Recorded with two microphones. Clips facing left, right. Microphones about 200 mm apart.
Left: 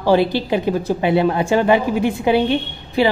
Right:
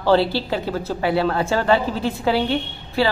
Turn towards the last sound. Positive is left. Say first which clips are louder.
# left 3 dB
turn(degrees=20)  # may be behind; listen again after turning